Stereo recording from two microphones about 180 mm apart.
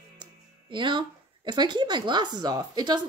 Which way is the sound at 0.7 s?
25° right (ahead or behind).